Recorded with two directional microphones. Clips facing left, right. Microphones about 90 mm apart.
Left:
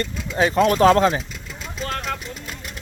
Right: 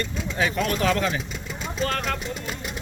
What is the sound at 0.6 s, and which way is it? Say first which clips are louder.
Speech: left 11 dB; 45° left (ahead or behind).